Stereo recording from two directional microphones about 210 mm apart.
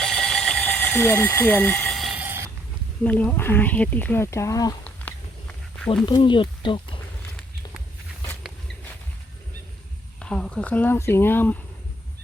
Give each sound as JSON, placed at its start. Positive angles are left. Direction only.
{"t": 0.0, "sound": "a sound", "side_deg": 0}
{"t": 3.0, "sound": "speech", "side_deg": 5}
{"t": 6.1, "sound": "speech", "side_deg": 20}
{"t": 10.2, "sound": "speech", "side_deg": 5}